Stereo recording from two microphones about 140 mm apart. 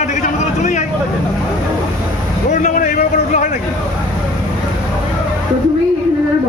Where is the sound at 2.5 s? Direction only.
70° left (ahead or behind).